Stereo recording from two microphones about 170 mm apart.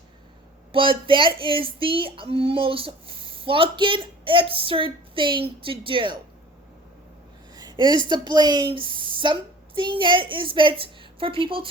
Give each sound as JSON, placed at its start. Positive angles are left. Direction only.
{"t": 0.7, "sound": "speech", "side_deg": -30}
{"t": 7.5, "sound": "a woman's voice", "side_deg": -25}